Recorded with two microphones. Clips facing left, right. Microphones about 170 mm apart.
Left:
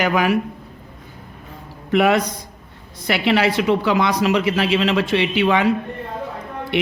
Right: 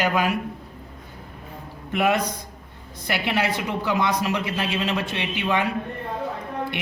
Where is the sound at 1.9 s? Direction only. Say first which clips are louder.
Left 6 dB; 85° left.